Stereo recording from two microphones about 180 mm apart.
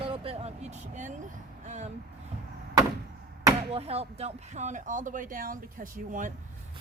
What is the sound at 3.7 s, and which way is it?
A woman's voice, 35° right (ahead or behind).